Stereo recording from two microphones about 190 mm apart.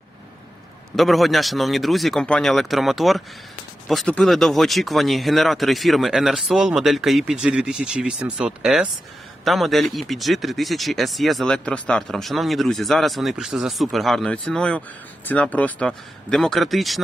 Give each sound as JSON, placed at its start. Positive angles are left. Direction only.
{"t": 0.9, "sound": "speech", "side_deg": 0}